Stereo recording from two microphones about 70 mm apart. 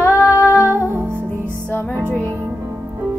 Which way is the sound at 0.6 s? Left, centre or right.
Right.